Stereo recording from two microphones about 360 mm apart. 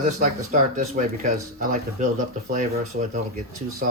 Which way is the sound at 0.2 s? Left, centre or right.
Right.